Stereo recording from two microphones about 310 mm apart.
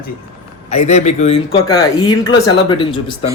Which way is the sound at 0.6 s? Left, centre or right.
Left.